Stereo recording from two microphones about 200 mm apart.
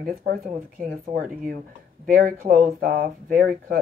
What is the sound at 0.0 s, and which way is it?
Speech, 45° right (ahead or behind).